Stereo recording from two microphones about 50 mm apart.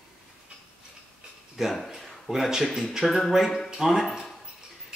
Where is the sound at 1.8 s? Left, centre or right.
Centre.